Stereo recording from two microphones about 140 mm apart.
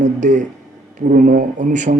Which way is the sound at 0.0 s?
60° right (ahead or behind).